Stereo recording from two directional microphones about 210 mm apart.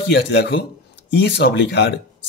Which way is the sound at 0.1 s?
55° left (ahead or behind).